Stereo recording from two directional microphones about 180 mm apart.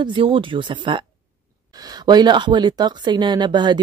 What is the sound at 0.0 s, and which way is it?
Speech, 30° right (ahead or behind).